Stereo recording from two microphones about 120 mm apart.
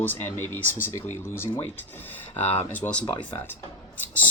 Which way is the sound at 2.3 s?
15° left (ahead or behind).